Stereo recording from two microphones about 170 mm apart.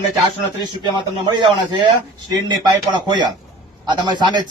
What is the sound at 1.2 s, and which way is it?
Speech, 25° right (ahead or behind).